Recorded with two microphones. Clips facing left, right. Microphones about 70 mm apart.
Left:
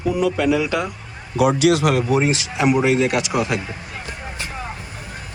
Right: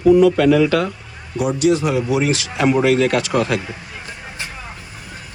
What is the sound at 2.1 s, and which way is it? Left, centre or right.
Speech, left.